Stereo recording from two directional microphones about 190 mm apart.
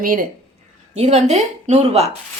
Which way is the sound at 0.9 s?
35° right (ahead or behind).